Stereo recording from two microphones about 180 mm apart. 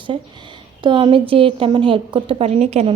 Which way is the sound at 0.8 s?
25° right (ahead or behind).